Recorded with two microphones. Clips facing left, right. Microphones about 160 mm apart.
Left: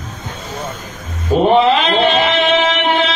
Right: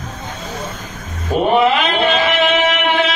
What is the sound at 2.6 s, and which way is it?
Music, 25° left (ahead or behind).